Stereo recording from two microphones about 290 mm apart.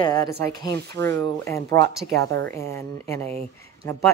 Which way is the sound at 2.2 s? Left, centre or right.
Right.